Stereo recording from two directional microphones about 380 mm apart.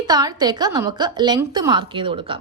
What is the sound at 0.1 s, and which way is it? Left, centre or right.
A woman's voice, centre.